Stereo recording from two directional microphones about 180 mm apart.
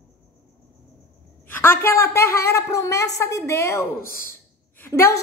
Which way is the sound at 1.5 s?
10° left (ahead or behind).